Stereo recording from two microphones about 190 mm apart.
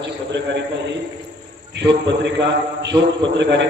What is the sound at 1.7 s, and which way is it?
A man's voice, 70° right (ahead or behind).